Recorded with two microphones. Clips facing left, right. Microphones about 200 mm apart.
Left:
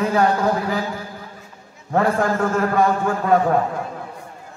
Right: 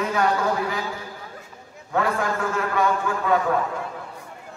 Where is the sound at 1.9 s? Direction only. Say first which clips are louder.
Left 5 dB; 40° left (ahead or behind).